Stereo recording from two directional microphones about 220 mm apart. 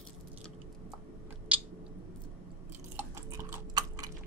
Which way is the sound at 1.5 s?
5° right (ahead or behind).